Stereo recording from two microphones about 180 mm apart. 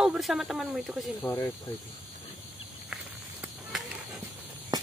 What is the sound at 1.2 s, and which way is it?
Speech, 15° left (ahead or behind).